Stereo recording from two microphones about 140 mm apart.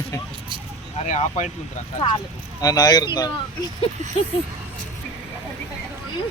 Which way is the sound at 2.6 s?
25° left (ahead or behind).